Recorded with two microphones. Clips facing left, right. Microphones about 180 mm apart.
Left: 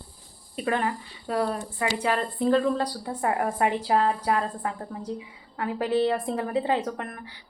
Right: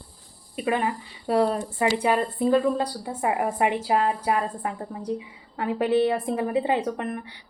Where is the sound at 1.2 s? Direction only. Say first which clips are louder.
Right 5 dB; 25° right (ahead or behind).